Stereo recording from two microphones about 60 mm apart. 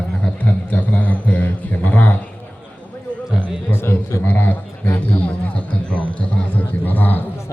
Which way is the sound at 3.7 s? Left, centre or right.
Left.